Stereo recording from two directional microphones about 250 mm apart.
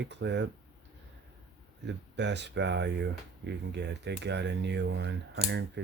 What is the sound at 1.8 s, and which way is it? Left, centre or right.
Speech, right.